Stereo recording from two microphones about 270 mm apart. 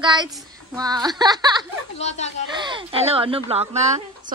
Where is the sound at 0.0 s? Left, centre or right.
Centre.